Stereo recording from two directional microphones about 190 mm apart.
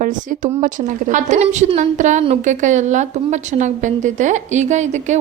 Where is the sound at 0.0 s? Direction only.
45° right (ahead or behind).